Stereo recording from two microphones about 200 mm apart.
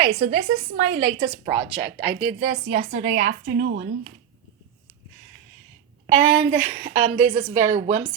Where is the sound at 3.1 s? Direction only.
65° right (ahead or behind).